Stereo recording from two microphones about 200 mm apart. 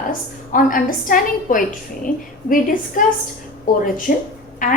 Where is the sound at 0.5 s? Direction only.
40° left (ahead or behind).